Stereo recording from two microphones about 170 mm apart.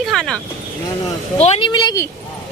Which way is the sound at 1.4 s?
40° left (ahead or behind).